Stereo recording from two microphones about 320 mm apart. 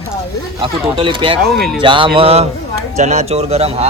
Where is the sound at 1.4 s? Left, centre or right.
Centre.